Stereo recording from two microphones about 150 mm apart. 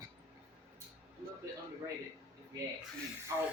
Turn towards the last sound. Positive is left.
turn(degrees=-20)  # may be behind; listen again after turning